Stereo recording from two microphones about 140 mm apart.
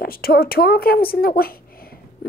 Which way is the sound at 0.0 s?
90° left.